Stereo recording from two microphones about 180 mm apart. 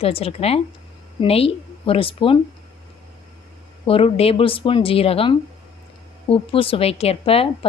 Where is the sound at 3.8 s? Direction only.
30° left (ahead or behind).